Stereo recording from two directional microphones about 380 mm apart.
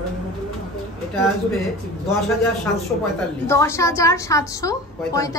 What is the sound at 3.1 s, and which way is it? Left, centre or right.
A woman's voice, centre.